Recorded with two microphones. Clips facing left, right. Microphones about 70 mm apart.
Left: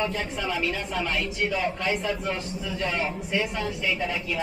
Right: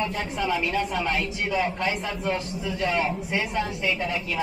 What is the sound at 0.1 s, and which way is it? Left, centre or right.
A man's voice, centre.